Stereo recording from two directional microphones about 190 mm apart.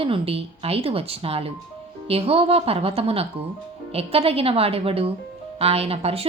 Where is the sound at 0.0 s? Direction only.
30° right (ahead or behind).